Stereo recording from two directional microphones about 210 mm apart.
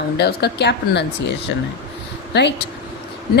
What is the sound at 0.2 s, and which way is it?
Speech, 50° left (ahead or behind).